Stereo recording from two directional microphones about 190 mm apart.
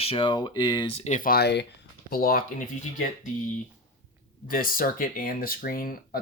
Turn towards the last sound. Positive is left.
turn(degrees=50)  # may be behind; listen again after turning